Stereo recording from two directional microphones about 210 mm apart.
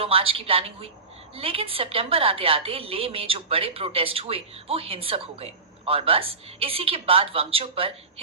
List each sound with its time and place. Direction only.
0.0 s a woman's voice: 25° right (ahead or behind)